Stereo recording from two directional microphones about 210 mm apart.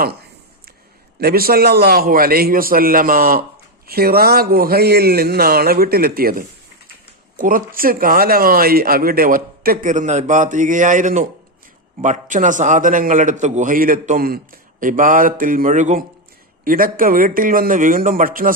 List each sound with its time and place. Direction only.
1.2 s a man's voice: 45° right (ahead or behind)